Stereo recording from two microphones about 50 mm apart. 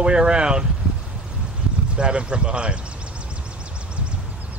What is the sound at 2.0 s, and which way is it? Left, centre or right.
Speech, right.